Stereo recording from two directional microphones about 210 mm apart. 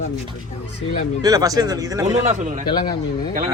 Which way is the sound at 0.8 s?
30° left (ahead or behind).